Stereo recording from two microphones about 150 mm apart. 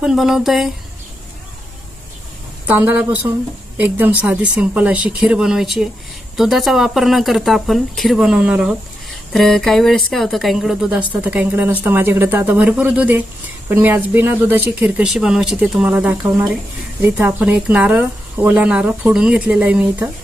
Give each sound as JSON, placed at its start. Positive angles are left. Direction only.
{"t": 0.0, "sound": "speech", "side_deg": -5}
{"t": 2.6, "sound": "speech", "side_deg": -10}